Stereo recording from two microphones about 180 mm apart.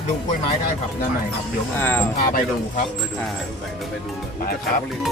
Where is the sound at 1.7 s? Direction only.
10° left (ahead or behind).